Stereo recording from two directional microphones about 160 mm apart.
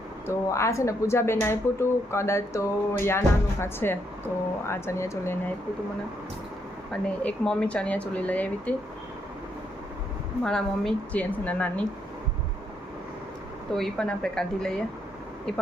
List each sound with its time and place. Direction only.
0.3 s speech: 20° left (ahead or behind)
6.9 s speech: 5° left (ahead or behind)
10.4 s a woman's voice: 5° left (ahead or behind)
13.7 s a woman's voice: 5° left (ahead or behind)